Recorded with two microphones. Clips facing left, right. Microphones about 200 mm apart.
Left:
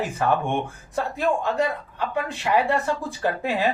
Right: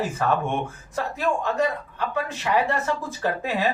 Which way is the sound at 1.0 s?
15° left (ahead or behind).